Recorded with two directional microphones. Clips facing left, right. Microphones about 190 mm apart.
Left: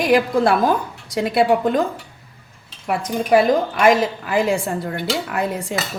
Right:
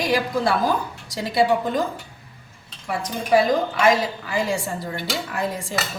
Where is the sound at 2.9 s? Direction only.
55° left (ahead or behind).